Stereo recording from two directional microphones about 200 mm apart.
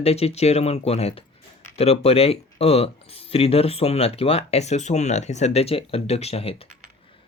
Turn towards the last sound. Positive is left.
turn(degrees=30)  # may be behind; listen again after turning